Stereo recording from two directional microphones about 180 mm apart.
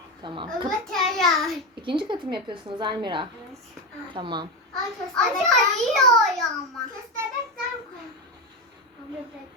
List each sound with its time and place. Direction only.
0.2 s a woman's voice: 25° right (ahead or behind)
0.9 s a child's voice: centre (ahead or behind)
1.8 s a woman's voice: 25° right (ahead or behind)
4.7 s a child's voice: centre (ahead or behind)